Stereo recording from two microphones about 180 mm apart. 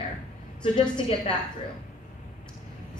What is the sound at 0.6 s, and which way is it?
Speech, 30° left (ahead or behind).